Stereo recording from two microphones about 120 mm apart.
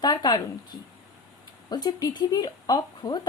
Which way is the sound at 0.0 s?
35° left (ahead or behind).